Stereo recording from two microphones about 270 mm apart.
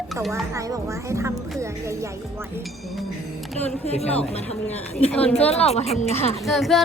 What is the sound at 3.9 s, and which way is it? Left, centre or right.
Speech, left.